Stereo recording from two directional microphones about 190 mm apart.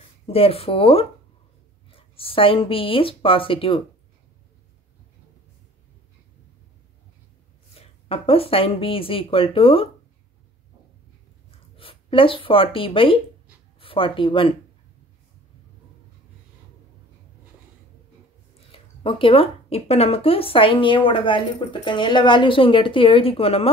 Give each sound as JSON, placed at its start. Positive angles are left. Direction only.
{"t": 0.3, "sound": "speech", "side_deg": 30}
{"t": 7.7, "sound": "speech", "side_deg": 30}
{"t": 11.7, "sound": "speech", "side_deg": 30}
{"t": 18.7, "sound": "speech", "side_deg": 25}